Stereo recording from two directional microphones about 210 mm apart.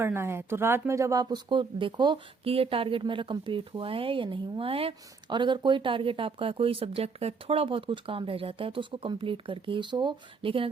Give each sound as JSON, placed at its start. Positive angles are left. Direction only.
{"t": 0.0, "sound": "speech", "side_deg": -10}